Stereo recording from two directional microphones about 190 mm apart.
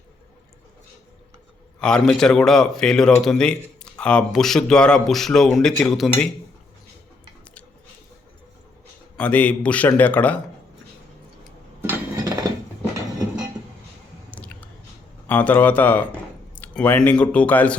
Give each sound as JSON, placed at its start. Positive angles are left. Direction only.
{"t": 1.8, "sound": "speech", "side_deg": 5}
{"t": 9.1, "sound": "a man's voice", "side_deg": 5}
{"t": 11.8, "sound": "a sound", "side_deg": -15}
{"t": 14.3, "sound": "squish", "side_deg": 5}
{"t": 15.3, "sound": "a man's voice", "side_deg": 10}